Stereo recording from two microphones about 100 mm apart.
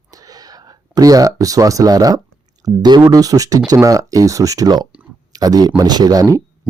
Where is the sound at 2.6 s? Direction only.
45° right (ahead or behind).